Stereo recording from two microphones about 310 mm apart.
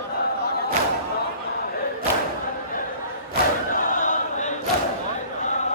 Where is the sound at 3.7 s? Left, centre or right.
Left.